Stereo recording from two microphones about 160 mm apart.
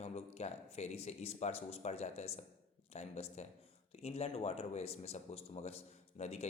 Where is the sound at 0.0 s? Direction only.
40° left (ahead or behind).